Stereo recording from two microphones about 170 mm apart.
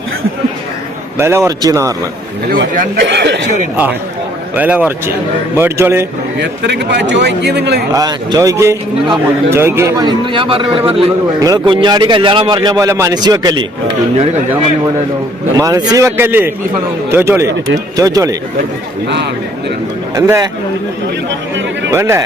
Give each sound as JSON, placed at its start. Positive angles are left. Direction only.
{"t": 1.2, "sound": "a man's voice", "side_deg": -15}
{"t": 3.1, "sound": "speech", "side_deg": -85}
{"t": 4.5, "sound": "a man's voice", "side_deg": -10}
{"t": 6.4, "sound": "speech", "side_deg": -90}
{"t": 7.9, "sound": "a man's voice", "side_deg": -20}
{"t": 11.3, "sound": "a man's voice", "side_deg": -20}
{"t": 15.5, "sound": "a man's voice", "side_deg": -20}
{"t": 19.0, "sound": "speech", "side_deg": -90}
{"t": 20.1, "sound": "a man's voice", "side_deg": -15}
{"t": 21.8, "sound": "a man's voice", "side_deg": -15}